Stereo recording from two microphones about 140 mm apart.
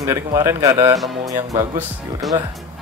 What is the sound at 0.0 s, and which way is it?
Speech, 20° right (ahead or behind).